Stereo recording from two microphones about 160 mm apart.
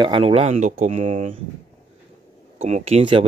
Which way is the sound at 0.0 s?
35° right (ahead or behind).